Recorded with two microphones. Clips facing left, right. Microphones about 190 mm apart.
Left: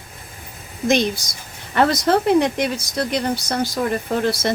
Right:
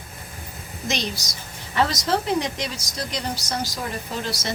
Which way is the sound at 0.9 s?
55° left (ahead or behind).